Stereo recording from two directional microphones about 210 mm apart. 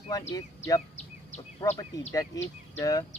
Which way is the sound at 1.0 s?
30° left (ahead or behind).